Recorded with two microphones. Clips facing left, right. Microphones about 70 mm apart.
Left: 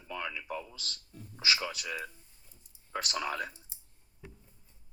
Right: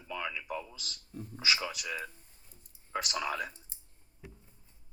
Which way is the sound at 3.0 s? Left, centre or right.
Centre.